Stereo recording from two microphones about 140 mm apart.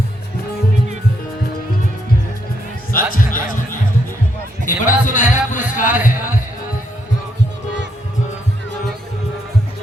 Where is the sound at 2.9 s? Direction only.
85° left; by 5.6 s 65° left (ahead or behind).